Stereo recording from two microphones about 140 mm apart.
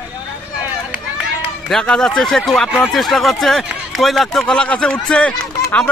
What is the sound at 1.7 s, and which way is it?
Speech, 5° left (ahead or behind).